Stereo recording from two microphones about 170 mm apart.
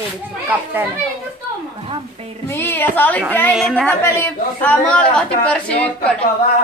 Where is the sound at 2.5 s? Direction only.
10° left (ahead or behind).